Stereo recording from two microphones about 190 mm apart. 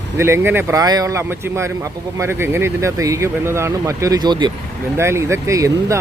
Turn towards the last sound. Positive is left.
turn(degrees=-15)  # may be behind; listen again after turning